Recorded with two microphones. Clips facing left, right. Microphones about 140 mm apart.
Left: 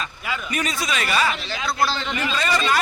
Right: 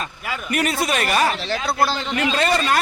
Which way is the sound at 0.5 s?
65° right (ahead or behind).